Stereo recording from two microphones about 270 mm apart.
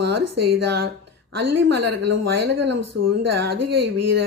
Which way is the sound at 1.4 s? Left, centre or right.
Right.